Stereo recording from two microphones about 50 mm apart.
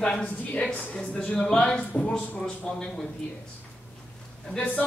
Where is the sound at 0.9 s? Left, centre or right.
Centre.